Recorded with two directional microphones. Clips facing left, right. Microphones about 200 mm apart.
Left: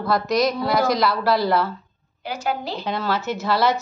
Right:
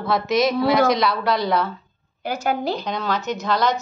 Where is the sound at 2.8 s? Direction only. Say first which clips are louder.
Left 1 dB; 5° left (ahead or behind).